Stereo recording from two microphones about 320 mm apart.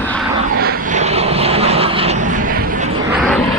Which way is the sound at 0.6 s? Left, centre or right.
Right.